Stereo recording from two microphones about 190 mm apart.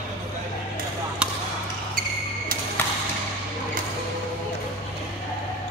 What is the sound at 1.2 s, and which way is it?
Basketball bounce, 5° right (ahead or behind).